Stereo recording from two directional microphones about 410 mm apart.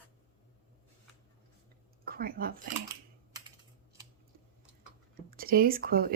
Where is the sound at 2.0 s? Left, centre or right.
Right.